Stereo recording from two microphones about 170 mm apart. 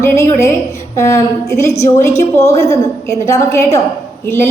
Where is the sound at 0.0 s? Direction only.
15° left (ahead or behind).